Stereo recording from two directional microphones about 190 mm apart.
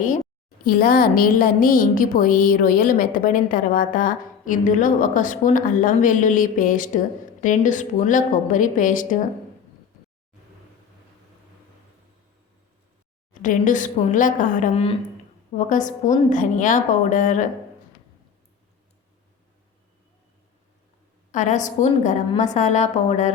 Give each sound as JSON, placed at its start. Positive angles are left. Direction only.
{"t": 0.6, "sound": "a woman's voice", "side_deg": 50}
{"t": 13.3, "sound": "a woman's voice", "side_deg": 45}
{"t": 21.3, "sound": "a woman's voice", "side_deg": 40}